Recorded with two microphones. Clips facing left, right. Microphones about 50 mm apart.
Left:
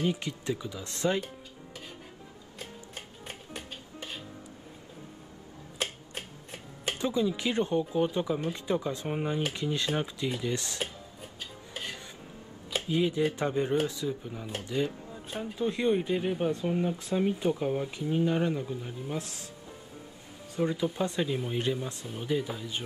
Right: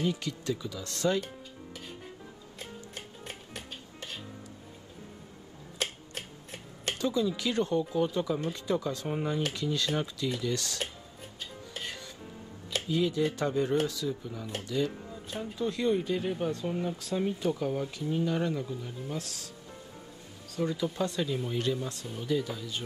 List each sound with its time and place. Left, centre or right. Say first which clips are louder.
0.0 s speech: left 1 dB; left
2.9 s music: even; centre
5.8 s tick-tock: even; centre
7.0 s speech: even; left
11.7 s music: left 1 dB; centre
12.8 s speech: left 1 dB; left
20.5 s speech: left 2 dB; left